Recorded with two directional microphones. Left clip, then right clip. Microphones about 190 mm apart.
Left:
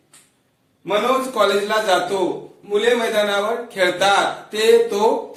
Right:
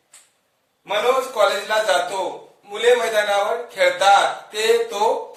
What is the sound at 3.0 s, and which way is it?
A man's voice, 15° left (ahead or behind).